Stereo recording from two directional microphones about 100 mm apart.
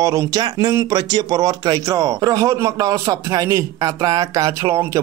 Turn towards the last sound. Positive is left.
turn(degrees=-30)  # may be behind; listen again after turning